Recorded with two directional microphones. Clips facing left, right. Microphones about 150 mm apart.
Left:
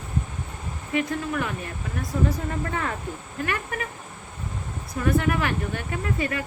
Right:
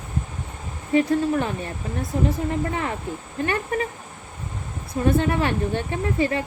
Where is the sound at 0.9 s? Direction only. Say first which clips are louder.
Right 7 dB; 35° right (ahead or behind).